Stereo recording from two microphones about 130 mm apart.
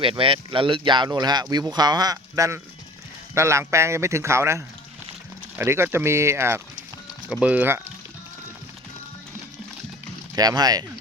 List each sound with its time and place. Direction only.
0.0 s speech: 40° right (ahead or behind); by 6.6 s 20° right (ahead or behind)
7.3 s speech: 5° right (ahead or behind)
10.3 s speech: 30° right (ahead or behind)